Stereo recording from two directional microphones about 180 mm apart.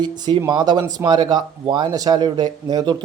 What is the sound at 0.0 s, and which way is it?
Speech, 25° right (ahead or behind).